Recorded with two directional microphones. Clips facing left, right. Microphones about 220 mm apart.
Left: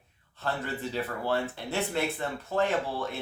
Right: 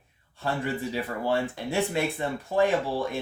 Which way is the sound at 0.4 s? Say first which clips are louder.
Right 4 dB; 10° right (ahead or behind).